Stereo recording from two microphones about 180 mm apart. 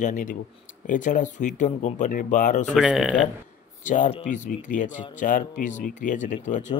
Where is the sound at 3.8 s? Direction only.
45° left (ahead or behind).